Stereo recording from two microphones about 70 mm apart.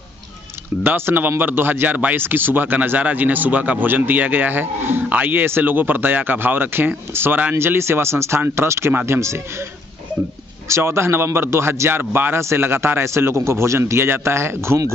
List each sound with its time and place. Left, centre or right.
0.8 s a man's voice: right
10.7 s a man's voice: right